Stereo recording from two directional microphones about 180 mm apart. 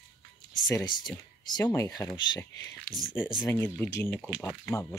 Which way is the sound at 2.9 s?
5° left (ahead or behind).